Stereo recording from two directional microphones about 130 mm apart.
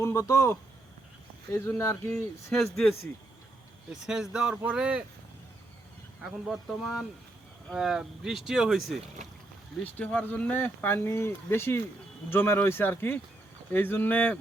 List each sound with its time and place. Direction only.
0.0 s speech: 25° left (ahead or behind)
1.5 s speech: 20° left (ahead or behind)
2.1 s speech: 5° left (ahead or behind)
4.0 s speech: 5° right (ahead or behind)
6.2 s speech: centre (ahead or behind)
9.8 s speech: 10° left (ahead or behind)